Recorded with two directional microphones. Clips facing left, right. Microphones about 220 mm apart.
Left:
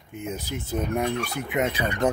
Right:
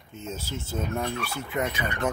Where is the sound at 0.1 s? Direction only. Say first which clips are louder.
Left 3 dB; 15° left (ahead or behind).